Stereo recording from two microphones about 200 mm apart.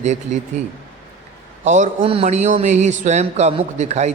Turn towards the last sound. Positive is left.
turn(degrees=-35)  # may be behind; listen again after turning